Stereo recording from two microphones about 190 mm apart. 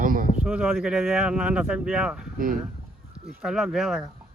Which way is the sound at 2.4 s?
50° right (ahead or behind).